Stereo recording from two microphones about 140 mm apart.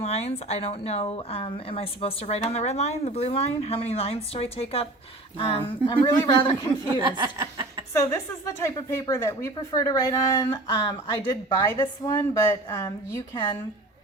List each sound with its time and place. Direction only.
0.0 s speech: 50° left (ahead or behind); by 6.7 s 30° left (ahead or behind)
6.8 s speech: 25° right (ahead or behind)
7.9 s a woman's voice: 20° left (ahead or behind)